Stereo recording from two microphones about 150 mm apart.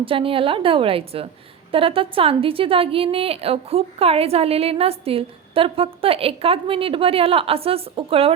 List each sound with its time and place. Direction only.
0.0 s a woman's voice: 35° right (ahead or behind)